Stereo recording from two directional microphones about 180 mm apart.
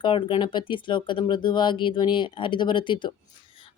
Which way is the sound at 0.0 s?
25° left (ahead or behind).